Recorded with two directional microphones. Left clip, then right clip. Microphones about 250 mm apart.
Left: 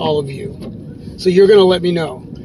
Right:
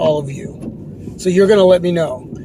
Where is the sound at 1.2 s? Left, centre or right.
Centre.